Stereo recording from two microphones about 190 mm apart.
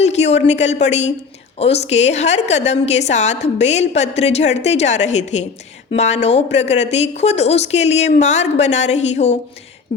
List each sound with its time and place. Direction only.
0.0 s a woman's voice: 35° left (ahead or behind)